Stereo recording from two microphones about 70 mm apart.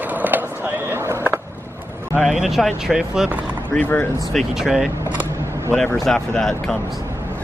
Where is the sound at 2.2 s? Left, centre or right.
Centre.